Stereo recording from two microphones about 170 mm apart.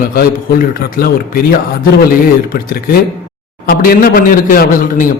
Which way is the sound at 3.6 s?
60° left (ahead or behind).